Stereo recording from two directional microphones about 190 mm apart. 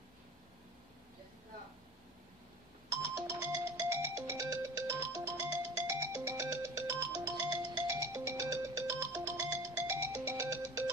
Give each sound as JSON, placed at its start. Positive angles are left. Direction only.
{"t": 2.9, "sound": "music", "side_deg": -15}